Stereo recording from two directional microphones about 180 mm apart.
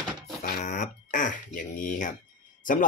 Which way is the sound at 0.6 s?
45° left (ahead or behind).